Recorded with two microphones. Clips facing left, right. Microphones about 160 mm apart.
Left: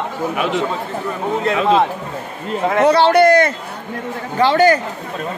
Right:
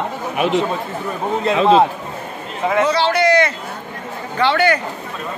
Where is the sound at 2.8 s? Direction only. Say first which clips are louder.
Left 7 dB; 55° left (ahead or behind).